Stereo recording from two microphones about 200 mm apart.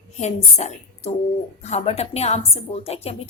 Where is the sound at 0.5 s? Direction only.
30° left (ahead or behind).